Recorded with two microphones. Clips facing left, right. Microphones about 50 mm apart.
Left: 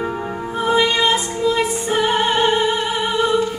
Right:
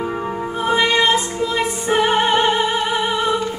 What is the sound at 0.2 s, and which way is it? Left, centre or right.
Music, centre.